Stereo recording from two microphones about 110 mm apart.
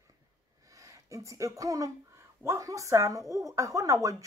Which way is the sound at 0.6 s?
30° right (ahead or behind).